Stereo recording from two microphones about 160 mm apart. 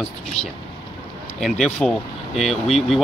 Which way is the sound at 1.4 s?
5° left (ahead or behind).